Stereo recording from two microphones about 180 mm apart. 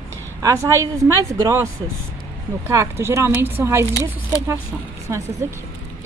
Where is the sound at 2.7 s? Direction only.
15° right (ahead or behind).